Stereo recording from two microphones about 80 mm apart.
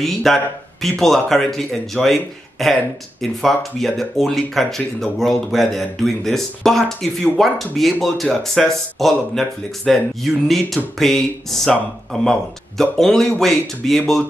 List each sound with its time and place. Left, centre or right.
0.0 s speech: centre